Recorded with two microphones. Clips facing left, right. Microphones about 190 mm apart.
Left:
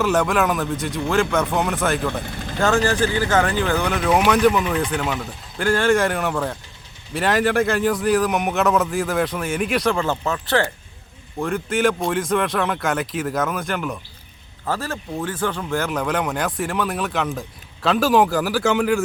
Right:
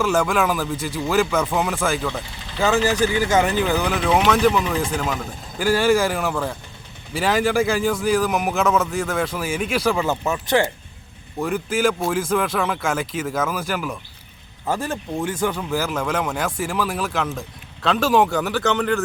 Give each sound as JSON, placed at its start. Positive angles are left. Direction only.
{"t": 0.0, "sound": "speech", "side_deg": 0}
{"t": 2.2, "sound": "vehicle", "side_deg": 50}
{"t": 2.6, "sound": "speech", "side_deg": -5}
{"t": 11.3, "sound": "speech", "side_deg": -5}
{"t": 14.7, "sound": "speech", "side_deg": -15}